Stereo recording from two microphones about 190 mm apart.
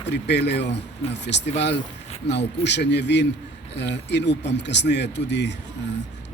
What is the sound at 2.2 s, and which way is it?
Speech, 65° left (ahead or behind).